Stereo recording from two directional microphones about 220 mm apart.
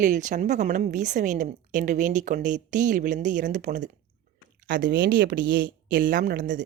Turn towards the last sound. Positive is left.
turn(degrees=-35)  # may be behind; listen again after turning